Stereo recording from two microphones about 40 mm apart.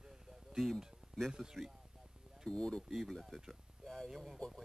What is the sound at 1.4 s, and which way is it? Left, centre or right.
Speech, centre.